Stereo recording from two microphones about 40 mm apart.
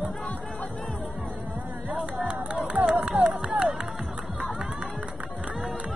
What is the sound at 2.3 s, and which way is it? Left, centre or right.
Music, right.